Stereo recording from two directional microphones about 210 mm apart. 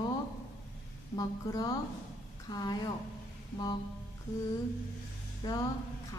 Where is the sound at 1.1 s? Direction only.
15° left (ahead or behind).